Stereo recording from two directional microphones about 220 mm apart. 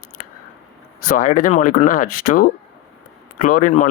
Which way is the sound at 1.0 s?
40° left (ahead or behind).